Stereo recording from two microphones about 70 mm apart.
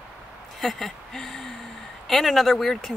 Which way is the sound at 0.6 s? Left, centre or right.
Centre.